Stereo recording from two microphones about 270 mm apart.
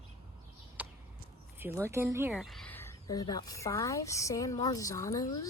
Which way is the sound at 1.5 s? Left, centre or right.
Centre.